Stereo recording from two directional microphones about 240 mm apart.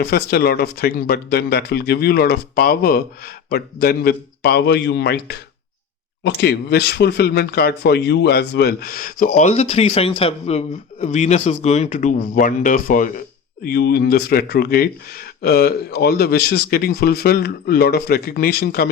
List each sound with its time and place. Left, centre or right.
0.0 s speech: left